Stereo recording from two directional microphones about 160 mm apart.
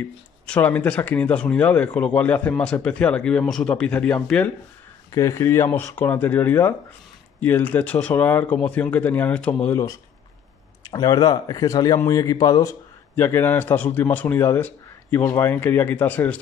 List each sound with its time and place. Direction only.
0.5 s a man's voice: 10° left (ahead or behind)
5.1 s a man's voice: 20° left (ahead or behind)